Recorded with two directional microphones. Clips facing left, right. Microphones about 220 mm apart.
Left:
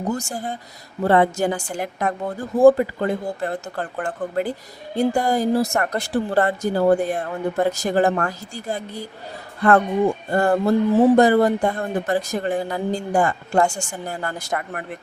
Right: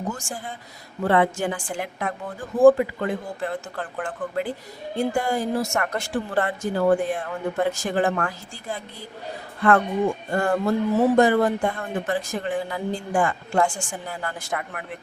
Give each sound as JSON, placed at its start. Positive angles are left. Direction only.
{"t": 0.1, "sound": "speech", "side_deg": 40}
{"t": 10.3, "sound": "speech", "side_deg": 35}